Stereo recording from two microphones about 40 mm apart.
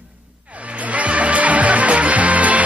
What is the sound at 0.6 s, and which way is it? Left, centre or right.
Music, right.